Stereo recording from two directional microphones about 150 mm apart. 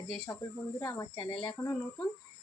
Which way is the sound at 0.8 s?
25° left (ahead or behind).